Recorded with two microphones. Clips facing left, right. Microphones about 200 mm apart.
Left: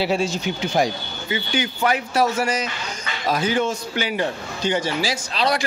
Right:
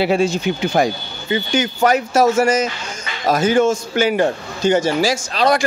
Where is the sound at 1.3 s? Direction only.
45° right (ahead or behind).